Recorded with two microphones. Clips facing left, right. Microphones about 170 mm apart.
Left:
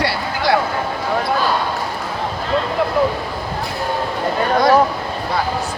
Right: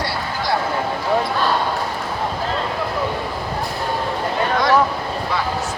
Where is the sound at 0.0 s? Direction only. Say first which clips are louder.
Left 4 dB; 75° left (ahead or behind).